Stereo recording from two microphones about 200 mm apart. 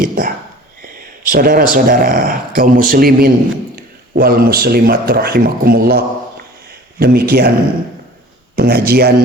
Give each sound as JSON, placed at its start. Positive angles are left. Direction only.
{"t": 0.0, "sound": "a sound", "side_deg": -45}
{"t": 1.3, "sound": "speech", "side_deg": -45}
{"t": 8.5, "sound": "speech", "side_deg": -50}